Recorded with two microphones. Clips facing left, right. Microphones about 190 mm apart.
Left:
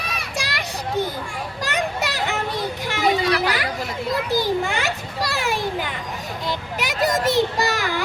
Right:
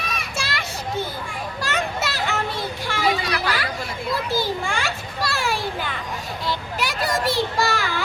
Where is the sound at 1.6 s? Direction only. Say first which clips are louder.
Left 1 dB; 15° left (ahead or behind).